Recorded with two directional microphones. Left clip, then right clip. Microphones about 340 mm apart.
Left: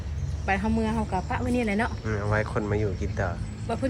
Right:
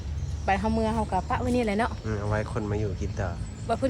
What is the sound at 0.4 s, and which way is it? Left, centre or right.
Speech, right.